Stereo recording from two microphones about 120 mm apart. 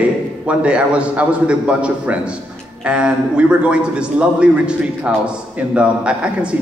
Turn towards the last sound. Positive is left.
turn(degrees=-10)  # may be behind; listen again after turning